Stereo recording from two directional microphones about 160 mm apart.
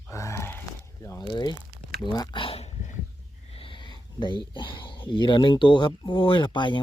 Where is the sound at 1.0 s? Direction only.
20° left (ahead or behind).